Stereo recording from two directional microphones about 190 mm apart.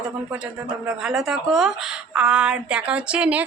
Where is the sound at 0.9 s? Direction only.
Centre (ahead or behind).